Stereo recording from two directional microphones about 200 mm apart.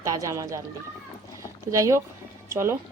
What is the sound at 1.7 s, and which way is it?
Speech, 15° right (ahead or behind).